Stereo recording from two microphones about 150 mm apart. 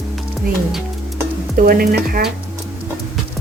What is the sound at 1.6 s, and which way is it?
Speech, 80° right.